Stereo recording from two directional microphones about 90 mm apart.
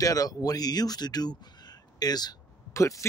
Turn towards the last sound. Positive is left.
turn(degrees=35)  # may be behind; listen again after turning